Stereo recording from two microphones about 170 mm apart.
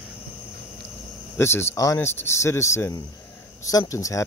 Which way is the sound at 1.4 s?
15° left (ahead or behind).